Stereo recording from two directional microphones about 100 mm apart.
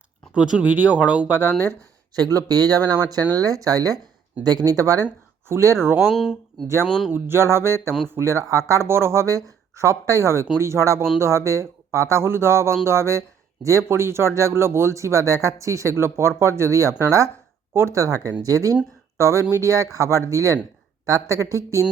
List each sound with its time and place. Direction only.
0.3 s speech: 10° right (ahead or behind)
2.1 s speech: 40° right (ahead or behind); by 6.0 s 25° right (ahead or behind)
6.1 s speech: centre (ahead or behind)
7.1 s speech: 25° right (ahead or behind)